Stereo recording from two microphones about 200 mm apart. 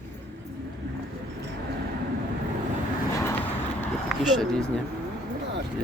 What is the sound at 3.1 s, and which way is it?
Vehicle, 10° left (ahead or behind).